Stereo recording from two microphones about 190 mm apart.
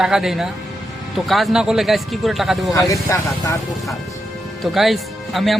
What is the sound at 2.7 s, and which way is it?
Speech, 15° left (ahead or behind).